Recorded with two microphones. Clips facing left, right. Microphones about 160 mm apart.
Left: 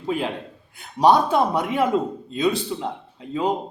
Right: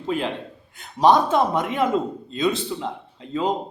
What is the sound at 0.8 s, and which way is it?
A man's voice, 10° left (ahead or behind).